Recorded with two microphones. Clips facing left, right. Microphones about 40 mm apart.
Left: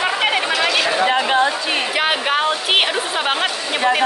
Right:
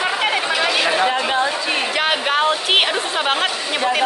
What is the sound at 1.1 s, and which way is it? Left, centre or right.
Chatter, left.